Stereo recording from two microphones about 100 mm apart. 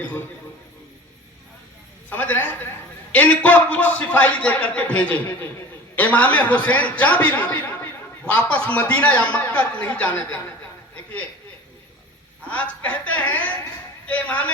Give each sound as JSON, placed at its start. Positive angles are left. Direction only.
{"t": 2.0, "sound": "a woman's voice", "side_deg": 20}
{"t": 12.5, "sound": "a man's voice", "side_deg": 15}